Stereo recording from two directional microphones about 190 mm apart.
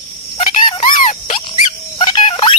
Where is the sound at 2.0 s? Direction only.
25° left (ahead or behind).